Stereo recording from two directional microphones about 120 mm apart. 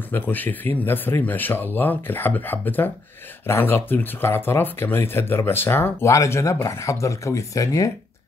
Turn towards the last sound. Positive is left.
turn(degrees=25)  # may be behind; listen again after turning